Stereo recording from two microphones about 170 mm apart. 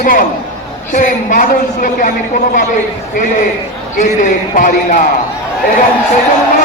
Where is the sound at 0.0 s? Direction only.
55° left (ahead or behind).